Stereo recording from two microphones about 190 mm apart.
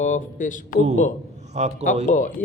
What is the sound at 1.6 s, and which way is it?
Speech, 35° right (ahead or behind).